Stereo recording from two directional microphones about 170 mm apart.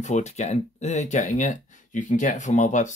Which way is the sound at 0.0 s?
40° left (ahead or behind).